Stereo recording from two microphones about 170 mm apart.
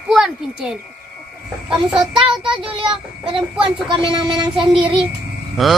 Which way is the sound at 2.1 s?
30° right (ahead or behind).